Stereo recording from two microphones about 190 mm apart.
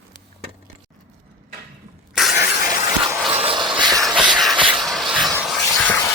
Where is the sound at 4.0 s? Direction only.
5° right (ahead or behind).